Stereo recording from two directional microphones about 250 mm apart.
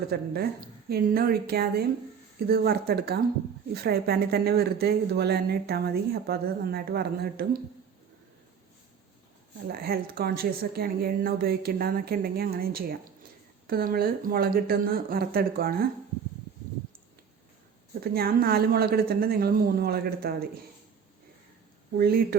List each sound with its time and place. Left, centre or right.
0.1 s speech: right
9.6 s speech: right
18.0 s speech: right
21.9 s speech: right